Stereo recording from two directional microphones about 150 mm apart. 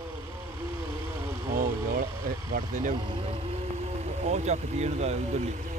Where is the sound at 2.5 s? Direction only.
60° right (ahead or behind).